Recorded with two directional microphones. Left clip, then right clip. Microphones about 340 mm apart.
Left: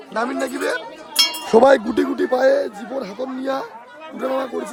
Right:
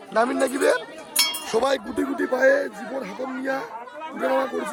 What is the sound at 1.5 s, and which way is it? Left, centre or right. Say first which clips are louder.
Wind chime: left 10 dB; left.